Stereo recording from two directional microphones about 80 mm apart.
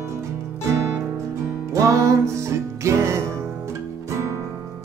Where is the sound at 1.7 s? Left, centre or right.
Right.